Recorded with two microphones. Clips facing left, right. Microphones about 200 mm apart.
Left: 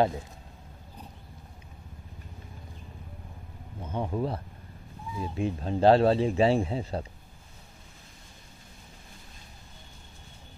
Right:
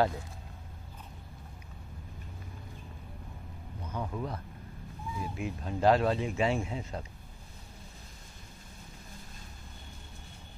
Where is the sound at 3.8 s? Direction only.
25° left (ahead or behind).